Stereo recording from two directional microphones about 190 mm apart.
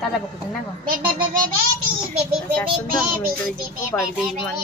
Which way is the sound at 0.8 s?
50° right (ahead or behind).